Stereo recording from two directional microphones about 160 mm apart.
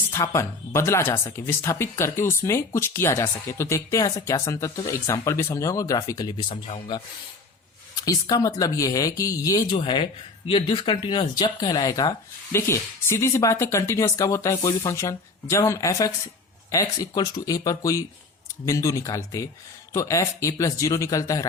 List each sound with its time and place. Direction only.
0.1 s speech: 20° left (ahead or behind)